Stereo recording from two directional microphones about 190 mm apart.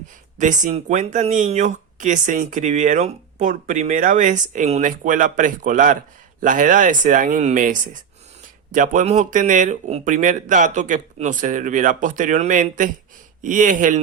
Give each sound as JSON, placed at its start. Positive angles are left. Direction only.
{"t": 0.3, "sound": "speech", "side_deg": -40}